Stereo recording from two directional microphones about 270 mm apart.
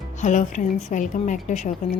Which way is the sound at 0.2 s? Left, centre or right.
Left.